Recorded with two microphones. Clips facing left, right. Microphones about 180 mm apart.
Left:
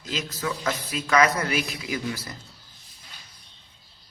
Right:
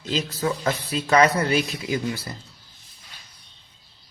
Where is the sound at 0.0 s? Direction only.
30° right (ahead or behind).